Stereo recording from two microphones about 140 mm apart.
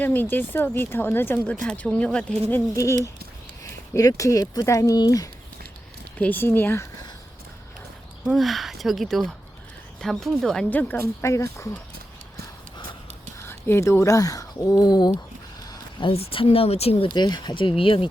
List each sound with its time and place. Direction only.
0.0 s speech: 15° left (ahead or behind)
2.5 s speech: 20° left (ahead or behind)
6.1 s speech: 10° left (ahead or behind)
8.3 s speech: centre (ahead or behind); by 11.8 s 20° left (ahead or behind)
13.4 s speech: 20° left (ahead or behind)
15.6 s a sound: 25° left (ahead or behind)
16.0 s speech: 45° left (ahead or behind)
17.2 s speech: 30° left (ahead or behind)